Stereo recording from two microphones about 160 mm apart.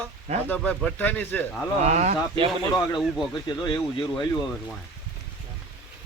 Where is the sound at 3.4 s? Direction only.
25° left (ahead or behind).